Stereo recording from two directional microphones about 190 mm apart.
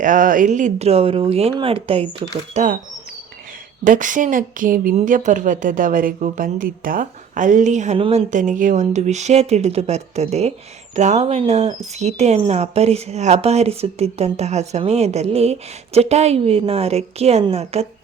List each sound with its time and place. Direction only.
0.0 s speech: 45° right (ahead or behind)
3.8 s a woman's voice: 45° right (ahead or behind)
8.3 s speech: 40° right (ahead or behind)